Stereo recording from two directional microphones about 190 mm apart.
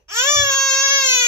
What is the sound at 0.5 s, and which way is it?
Baby cry, 5° left (ahead or behind).